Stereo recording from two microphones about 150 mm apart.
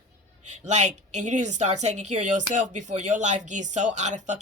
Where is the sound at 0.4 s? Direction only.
50° right (ahead or behind).